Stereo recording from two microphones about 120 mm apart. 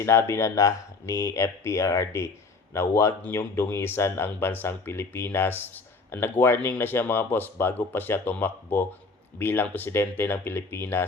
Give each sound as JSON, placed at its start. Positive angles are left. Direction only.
{"t": 0.0, "sound": "speech", "side_deg": 20}